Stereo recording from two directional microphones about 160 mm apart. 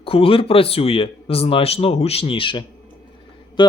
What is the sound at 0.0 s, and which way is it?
Speech, 35° left (ahead or behind).